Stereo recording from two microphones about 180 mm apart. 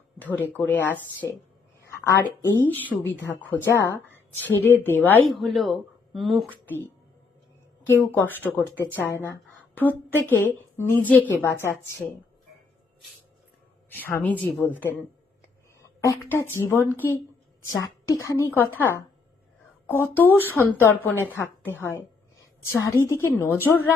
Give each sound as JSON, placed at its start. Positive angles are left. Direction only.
{"t": 0.2, "sound": "a woman's voice", "side_deg": 10}
{"t": 5.4, "sound": "speech", "side_deg": 0}
{"t": 7.9, "sound": "a woman's voice", "side_deg": 10}
{"t": 13.9, "sound": "a woman's voice", "side_deg": 10}
{"t": 19.9, "sound": "a woman's voice", "side_deg": 10}